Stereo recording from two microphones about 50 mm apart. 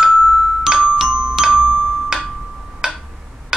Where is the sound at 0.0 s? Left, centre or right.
Centre.